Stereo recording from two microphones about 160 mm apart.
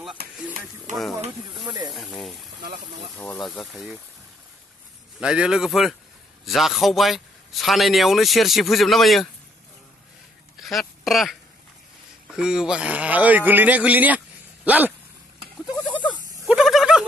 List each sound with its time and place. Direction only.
0.2 s speech: 80° right
0.9 s a man's voice: centre (ahead or behind)
1.7 s speech: 25° right (ahead or behind)
2.0 s a man's voice: centre (ahead or behind)
3.3 s a man's voice: centre (ahead or behind)
5.2 s a man's voice: 5° right (ahead or behind)
10.6 s speech: centre (ahead or behind)
15.9 s a sound: 30° left (ahead or behind)
16.4 s a sound: 5° right (ahead or behind)